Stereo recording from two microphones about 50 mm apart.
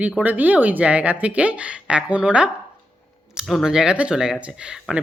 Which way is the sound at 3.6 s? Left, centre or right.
Centre.